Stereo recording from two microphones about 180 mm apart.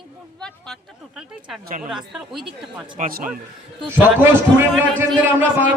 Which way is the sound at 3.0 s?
55° right (ahead or behind).